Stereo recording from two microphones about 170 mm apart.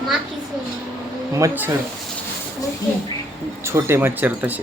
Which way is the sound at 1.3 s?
15° right (ahead or behind).